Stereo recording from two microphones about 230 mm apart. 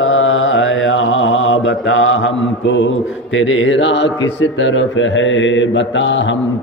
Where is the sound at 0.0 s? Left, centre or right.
Left.